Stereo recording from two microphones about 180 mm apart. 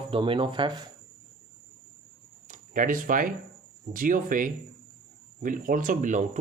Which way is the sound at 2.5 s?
45° right (ahead or behind).